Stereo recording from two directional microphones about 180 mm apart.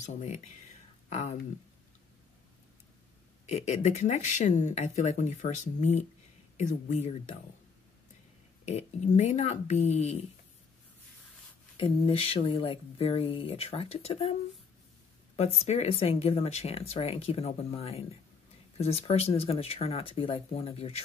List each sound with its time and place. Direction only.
0.0 s speech: 40° left (ahead or behind)
3.4 s speech: 40° left (ahead or behind)
8.6 s speech: 40° left (ahead or behind)
11.7 s speech: 30° left (ahead or behind)
15.3 s speech: 35° left (ahead or behind)